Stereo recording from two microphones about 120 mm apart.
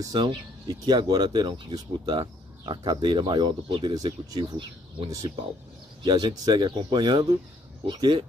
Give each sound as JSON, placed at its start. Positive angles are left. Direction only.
{"t": 0.0, "sound": "speech", "side_deg": -40}
{"t": 6.0, "sound": "speech", "side_deg": -35}